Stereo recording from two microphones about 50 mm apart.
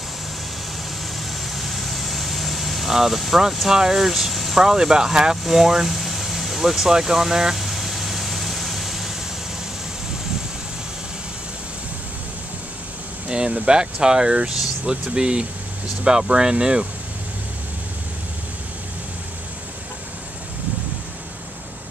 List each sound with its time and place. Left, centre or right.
1.5 s vehicle: centre
3.6 s speech: centre
5.4 s vehicle: centre
13.3 s speech: centre